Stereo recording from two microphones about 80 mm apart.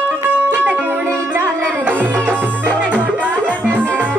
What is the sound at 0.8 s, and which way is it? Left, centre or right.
Music, right.